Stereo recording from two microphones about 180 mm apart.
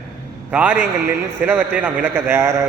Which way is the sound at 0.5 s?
10° right (ahead or behind).